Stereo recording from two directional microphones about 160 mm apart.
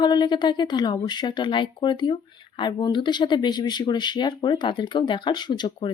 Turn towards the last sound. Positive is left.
turn(degrees=30)  # may be behind; listen again after turning